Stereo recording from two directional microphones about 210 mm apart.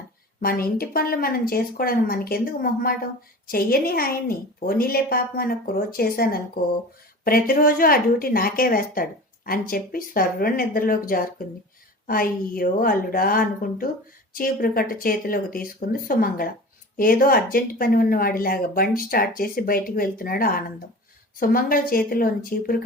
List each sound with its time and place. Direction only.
0.3 s speech: 45° left (ahead or behind)